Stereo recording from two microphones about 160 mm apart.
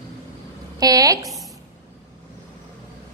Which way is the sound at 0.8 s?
20° right (ahead or behind).